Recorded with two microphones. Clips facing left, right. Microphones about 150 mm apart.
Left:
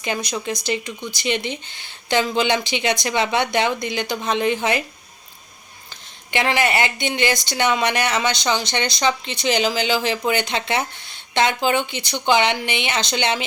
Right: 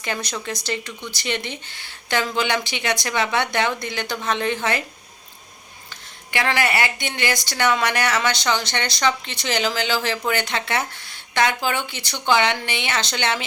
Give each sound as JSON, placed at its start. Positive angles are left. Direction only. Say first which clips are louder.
{"t": 0.0, "sound": "speech", "louder": "left 3 dB", "side_deg": 15}
{"t": 5.9, "sound": "speech", "louder": "left 3 dB", "side_deg": 20}